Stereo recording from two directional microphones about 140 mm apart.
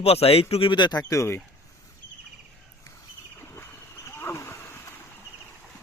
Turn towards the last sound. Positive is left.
turn(degrees=20)  # may be behind; listen again after turning